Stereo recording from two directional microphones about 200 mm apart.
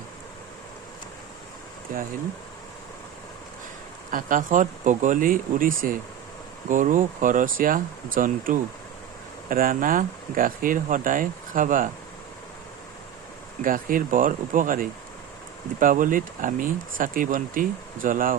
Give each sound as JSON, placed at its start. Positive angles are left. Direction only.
{"t": 1.9, "sound": "speech", "side_deg": -45}
{"t": 4.1, "sound": "speech", "side_deg": -40}
{"t": 13.6, "sound": "speech", "side_deg": -45}